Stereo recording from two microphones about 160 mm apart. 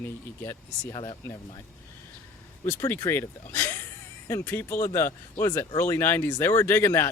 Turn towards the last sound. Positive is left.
turn(degrees=15)  # may be behind; listen again after turning